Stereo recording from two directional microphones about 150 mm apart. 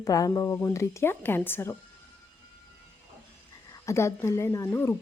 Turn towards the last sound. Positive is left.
turn(degrees=15)  # may be behind; listen again after turning